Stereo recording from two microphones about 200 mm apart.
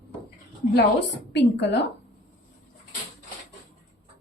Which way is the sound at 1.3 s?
60° left (ahead or behind).